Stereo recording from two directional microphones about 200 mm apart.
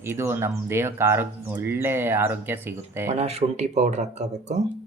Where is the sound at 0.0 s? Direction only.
10° right (ahead or behind).